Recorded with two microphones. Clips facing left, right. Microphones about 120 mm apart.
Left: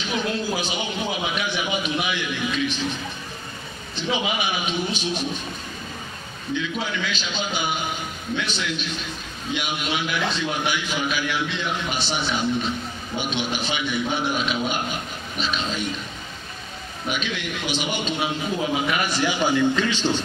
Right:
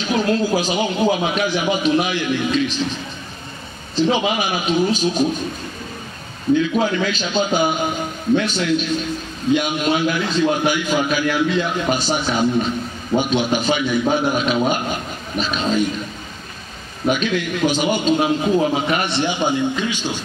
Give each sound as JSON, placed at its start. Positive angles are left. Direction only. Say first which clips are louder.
{"t": 0.0, "sound": "a man's voice", "louder": "right 7 dB", "side_deg": -40}
{"t": 3.9, "sound": "a man's voice", "louder": "right 8 dB", "side_deg": -35}
{"t": 6.5, "sound": "a man's voice", "louder": "right 10 dB", "side_deg": -45}
{"t": 17.1, "sound": "a man's voice", "louder": "right 8 dB", "side_deg": -45}